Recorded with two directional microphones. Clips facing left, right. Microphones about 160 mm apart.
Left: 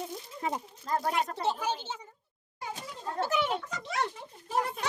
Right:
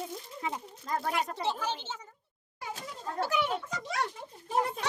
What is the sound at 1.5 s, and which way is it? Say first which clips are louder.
Speech: left 3 dB; 15° left (ahead or behind).